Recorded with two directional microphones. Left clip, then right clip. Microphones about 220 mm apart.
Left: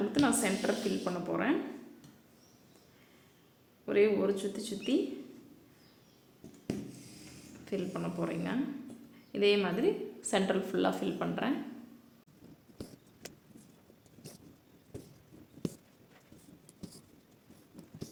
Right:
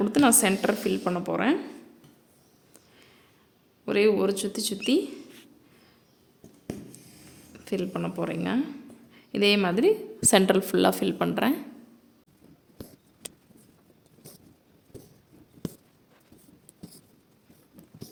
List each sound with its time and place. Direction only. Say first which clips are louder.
0.1 s a woman's voice: right 11 dB; 45° right (ahead or behind)
3.8 s speech: right 5 dB; 40° right (ahead or behind)
7.6 s a woman's voice: right 6 dB; 40° right (ahead or behind)
12.7 s a sound: right 2 dB; 10° right (ahead or behind)